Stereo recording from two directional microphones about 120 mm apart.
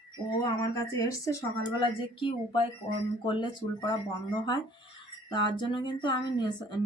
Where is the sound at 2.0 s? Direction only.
45° left (ahead or behind).